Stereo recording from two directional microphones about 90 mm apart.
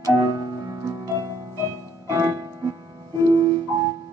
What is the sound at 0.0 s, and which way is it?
Music, 45° right (ahead or behind).